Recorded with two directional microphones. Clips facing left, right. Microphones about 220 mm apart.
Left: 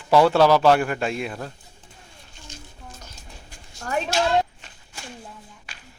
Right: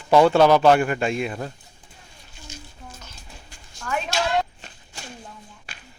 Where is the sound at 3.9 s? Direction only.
35° left (ahead or behind).